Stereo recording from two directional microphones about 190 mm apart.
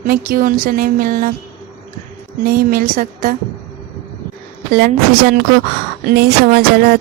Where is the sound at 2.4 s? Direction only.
50° right (ahead or behind).